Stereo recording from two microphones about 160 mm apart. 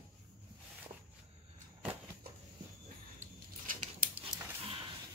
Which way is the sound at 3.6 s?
55° right (ahead or behind).